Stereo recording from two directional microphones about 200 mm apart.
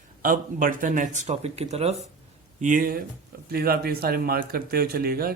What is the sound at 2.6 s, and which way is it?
Speech, 40° right (ahead or behind).